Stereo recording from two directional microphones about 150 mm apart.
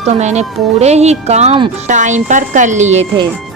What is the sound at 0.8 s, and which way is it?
Speech, 45° right (ahead or behind).